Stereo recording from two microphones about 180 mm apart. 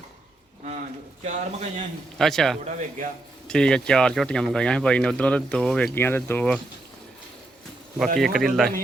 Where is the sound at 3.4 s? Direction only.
5° left (ahead or behind).